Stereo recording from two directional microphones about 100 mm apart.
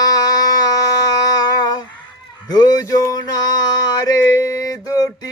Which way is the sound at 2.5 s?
40° left (ahead or behind).